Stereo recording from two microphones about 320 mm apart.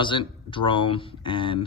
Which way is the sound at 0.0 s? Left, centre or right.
Centre.